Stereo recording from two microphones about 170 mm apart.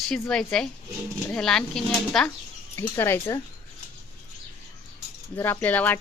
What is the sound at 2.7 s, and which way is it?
Speech, 15° left (ahead or behind).